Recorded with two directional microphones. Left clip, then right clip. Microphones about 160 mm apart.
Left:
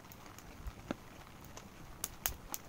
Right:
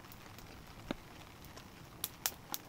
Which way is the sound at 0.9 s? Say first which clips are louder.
Even; 10° left (ahead or behind).